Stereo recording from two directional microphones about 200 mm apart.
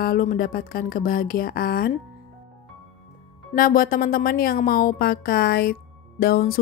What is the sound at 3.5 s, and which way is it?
Speech, 45° left (ahead or behind).